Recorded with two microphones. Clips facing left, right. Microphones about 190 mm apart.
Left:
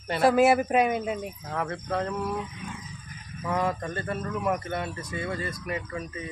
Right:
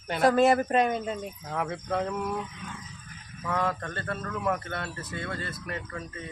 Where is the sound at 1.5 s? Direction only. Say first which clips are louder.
Even; 5° right (ahead or behind).